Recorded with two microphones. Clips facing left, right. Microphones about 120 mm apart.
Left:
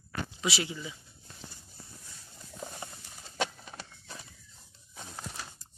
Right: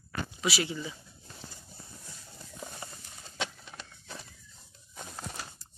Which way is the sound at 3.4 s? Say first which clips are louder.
Left 4 dB; 5° left (ahead or behind).